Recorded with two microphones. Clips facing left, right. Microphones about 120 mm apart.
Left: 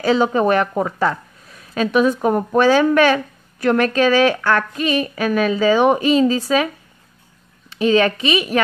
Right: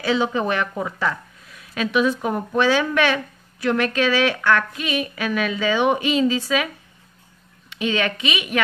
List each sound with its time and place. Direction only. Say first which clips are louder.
0.0 s a woman's voice: left 5 dB; 45° left (ahead or behind)
7.7 s a woman's voice: left 7 dB; 35° left (ahead or behind)